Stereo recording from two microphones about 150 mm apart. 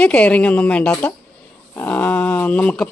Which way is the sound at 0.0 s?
10° left (ahead or behind).